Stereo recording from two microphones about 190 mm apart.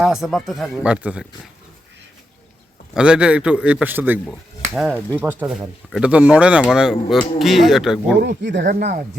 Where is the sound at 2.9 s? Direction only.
5° right (ahead or behind).